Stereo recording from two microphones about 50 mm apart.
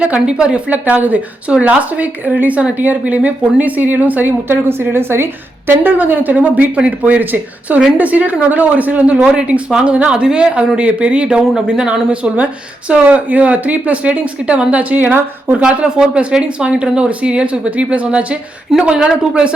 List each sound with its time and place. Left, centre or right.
0.0 s speech: right
0.7 s speech: right; by 11.9 s centre
11.9 s speech: right
15.6 s speech: right